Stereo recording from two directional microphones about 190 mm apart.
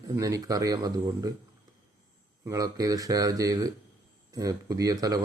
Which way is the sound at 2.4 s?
20° right (ahead or behind).